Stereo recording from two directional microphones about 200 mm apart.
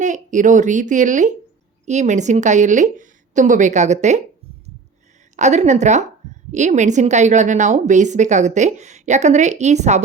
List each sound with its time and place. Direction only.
0.0 s a woman's voice: 40° right (ahead or behind)
5.4 s a woman's voice: 35° right (ahead or behind)